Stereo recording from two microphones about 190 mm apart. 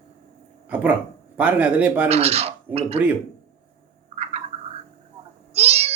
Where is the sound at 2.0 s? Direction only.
35° right (ahead or behind).